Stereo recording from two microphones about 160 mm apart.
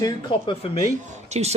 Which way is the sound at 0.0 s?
30° left (ahead or behind).